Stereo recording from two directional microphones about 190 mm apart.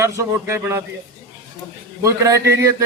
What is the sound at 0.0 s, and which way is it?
Speech, 15° right (ahead or behind).